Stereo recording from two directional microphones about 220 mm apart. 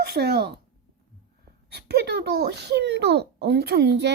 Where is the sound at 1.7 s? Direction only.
45° right (ahead or behind).